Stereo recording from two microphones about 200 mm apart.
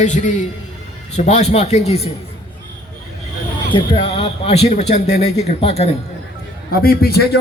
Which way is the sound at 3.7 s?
25° left (ahead or behind).